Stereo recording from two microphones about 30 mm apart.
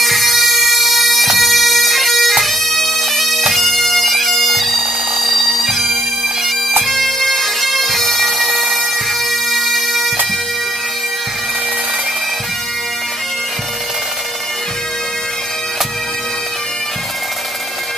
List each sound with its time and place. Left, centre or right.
0.0 s bagpipes: centre
4.7 s bagpipes: right
6.9 s bagpipes: centre
8.1 s bagpipes: right
9.3 s bagpipes: centre